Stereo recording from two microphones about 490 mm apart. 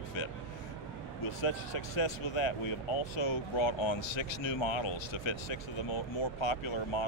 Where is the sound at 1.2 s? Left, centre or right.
Left.